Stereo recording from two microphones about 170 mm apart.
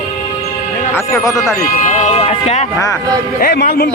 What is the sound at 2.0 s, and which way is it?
Speech, 40° left (ahead or behind).